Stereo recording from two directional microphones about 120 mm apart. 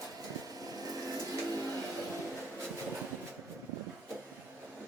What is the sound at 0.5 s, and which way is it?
Vehicle, 30° right (ahead or behind).